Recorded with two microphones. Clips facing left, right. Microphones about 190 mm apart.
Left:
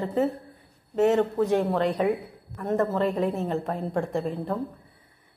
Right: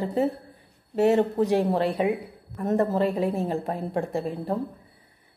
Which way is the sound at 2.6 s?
35° right (ahead or behind).